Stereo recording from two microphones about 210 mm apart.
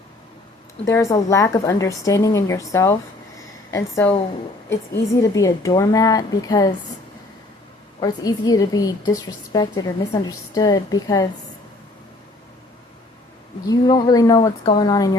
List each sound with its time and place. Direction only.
0.9 s a woman's voice: 15° left (ahead or behind)
8.0 s a woman's voice: 15° left (ahead or behind)
13.7 s a woman's voice: 20° left (ahead or behind)